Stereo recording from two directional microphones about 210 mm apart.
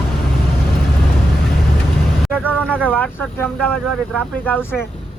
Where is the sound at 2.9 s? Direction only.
10° left (ahead or behind).